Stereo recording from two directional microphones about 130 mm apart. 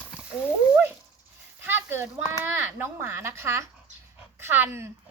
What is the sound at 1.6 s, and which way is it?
A child's voice, 15° right (ahead or behind).